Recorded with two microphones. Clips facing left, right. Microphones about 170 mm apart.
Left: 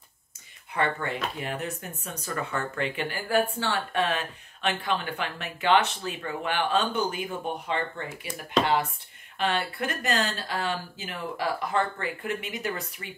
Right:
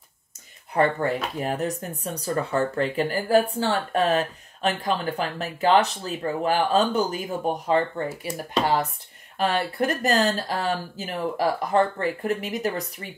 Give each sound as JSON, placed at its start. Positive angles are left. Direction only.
{"t": 0.7, "sound": "speech", "side_deg": -40}
{"t": 9.4, "sound": "speech", "side_deg": -40}